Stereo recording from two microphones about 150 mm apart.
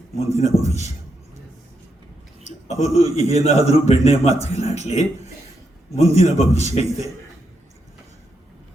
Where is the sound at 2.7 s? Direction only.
45° left (ahead or behind).